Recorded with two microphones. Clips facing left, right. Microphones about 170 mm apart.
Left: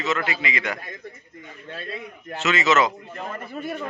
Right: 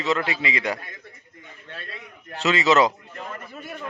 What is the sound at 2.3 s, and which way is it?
Speech, 35° right (ahead or behind).